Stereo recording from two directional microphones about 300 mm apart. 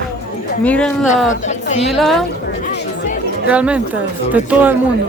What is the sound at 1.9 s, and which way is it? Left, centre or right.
Speech, centre.